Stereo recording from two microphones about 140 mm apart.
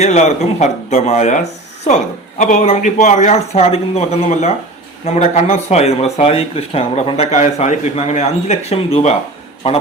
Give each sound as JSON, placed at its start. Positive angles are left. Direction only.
{"t": 0.0, "sound": "speech", "side_deg": 55}
{"t": 2.4, "sound": "speech", "side_deg": 60}